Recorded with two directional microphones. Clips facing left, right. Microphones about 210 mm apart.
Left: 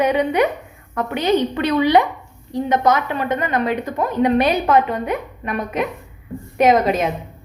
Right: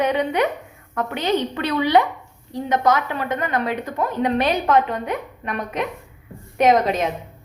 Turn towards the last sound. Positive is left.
turn(degrees=5)  # may be behind; listen again after turning